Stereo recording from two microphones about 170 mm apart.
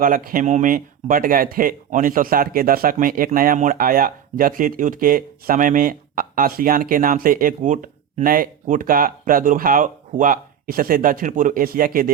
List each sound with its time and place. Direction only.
0.0 s speech: 55° right (ahead or behind)